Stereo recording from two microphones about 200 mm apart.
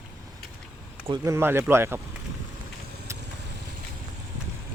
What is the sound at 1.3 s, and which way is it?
Speech, 10° right (ahead or behind).